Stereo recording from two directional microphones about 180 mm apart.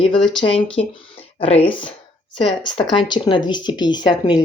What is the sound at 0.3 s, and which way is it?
Speech, 30° left (ahead or behind).